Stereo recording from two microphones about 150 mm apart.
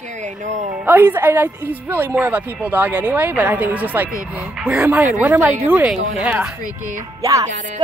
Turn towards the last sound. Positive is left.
turn(degrees=-20)  # may be behind; listen again after turning